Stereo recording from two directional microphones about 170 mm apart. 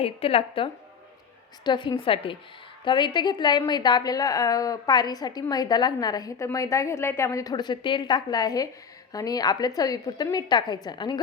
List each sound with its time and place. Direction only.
0.0 s a woman's voice: 35° left (ahead or behind)